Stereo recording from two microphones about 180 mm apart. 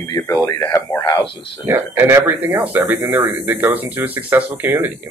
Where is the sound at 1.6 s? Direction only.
10° right (ahead or behind).